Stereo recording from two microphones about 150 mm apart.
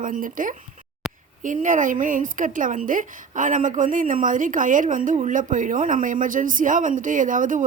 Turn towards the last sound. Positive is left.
turn(degrees=-60)  # may be behind; listen again after turning